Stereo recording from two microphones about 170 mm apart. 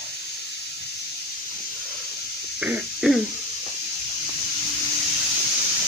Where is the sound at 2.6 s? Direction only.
5° right (ahead or behind).